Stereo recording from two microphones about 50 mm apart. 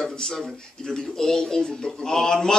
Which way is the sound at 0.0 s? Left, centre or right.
Centre.